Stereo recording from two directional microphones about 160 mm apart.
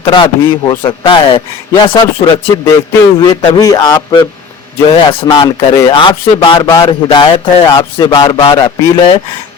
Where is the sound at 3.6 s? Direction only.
25° left (ahead or behind).